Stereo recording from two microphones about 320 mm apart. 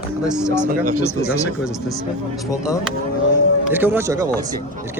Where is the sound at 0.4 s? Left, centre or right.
Centre.